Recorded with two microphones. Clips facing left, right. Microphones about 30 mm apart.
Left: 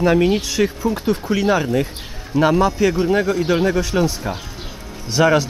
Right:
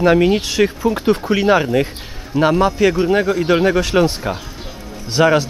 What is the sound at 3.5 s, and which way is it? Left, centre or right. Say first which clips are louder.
Speech: right 3 dB; right.